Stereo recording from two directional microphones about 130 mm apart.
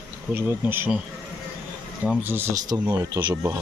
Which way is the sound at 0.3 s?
15° right (ahead or behind).